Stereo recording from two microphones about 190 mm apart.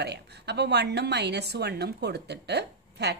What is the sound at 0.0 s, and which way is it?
A woman's voice, 60° right (ahead or behind).